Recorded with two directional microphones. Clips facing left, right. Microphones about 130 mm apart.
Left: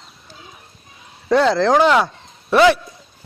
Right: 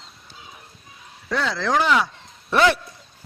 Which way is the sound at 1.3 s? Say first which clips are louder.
Left 8 dB; 35° left (ahead or behind).